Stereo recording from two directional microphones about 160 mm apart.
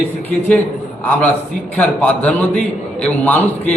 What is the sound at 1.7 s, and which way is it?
A man's voice, 10° left (ahead or behind).